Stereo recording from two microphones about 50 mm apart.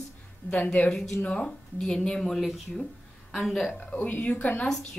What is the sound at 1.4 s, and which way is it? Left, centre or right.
Speech, centre.